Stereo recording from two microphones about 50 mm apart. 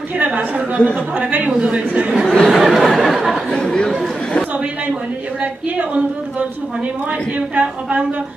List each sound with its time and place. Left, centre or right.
0.2 s speech: right
2.5 s a sound: centre
3.5 s speech: centre
5.4 s speech: right
7.1 s speech: right